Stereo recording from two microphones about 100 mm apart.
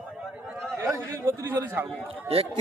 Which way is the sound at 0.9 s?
25° right (ahead or behind).